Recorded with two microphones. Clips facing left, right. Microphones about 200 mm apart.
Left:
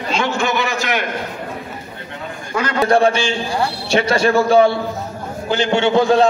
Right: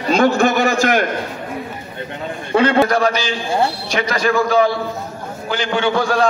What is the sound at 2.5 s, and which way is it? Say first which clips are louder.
Speech: right 6 dB; 30° right (ahead or behind).